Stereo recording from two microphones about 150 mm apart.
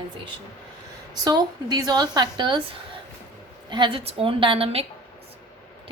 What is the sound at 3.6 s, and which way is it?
A woman's voice, 30° right (ahead or behind).